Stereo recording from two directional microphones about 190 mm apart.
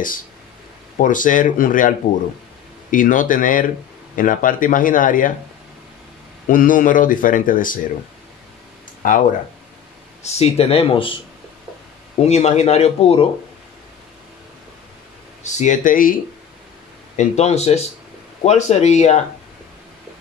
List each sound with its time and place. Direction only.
0.9 s speech: 45° left (ahead or behind)
6.5 s speech: 45° left (ahead or behind)
9.0 s speech: 45° left (ahead or behind)
10.2 s speech: 35° left (ahead or behind)
12.2 s speech: 35° left (ahead or behind)
15.4 s speech: 40° left (ahead or behind)
17.2 s speech: 35° left (ahead or behind)